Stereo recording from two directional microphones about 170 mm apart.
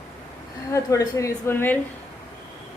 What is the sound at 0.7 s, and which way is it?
A woman's voice, 20° left (ahead or behind).